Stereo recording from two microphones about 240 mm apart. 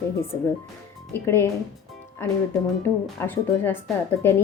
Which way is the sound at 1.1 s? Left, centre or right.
Centre.